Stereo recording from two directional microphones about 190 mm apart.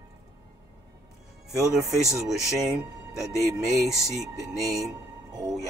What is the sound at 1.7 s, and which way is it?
Speech, centre (ahead or behind).